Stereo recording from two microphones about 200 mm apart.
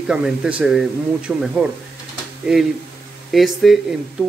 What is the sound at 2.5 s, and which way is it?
Speech, centre (ahead or behind).